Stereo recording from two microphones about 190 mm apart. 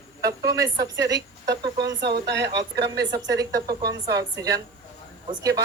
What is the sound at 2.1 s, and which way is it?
Speech, 65° right (ahead or behind).